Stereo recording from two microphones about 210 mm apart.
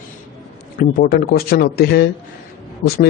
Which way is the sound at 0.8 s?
45° left (ahead or behind).